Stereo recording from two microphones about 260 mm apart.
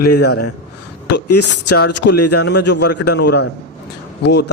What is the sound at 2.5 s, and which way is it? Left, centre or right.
A man's voice, left.